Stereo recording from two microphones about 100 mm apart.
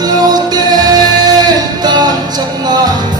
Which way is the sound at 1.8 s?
45° right (ahead or behind).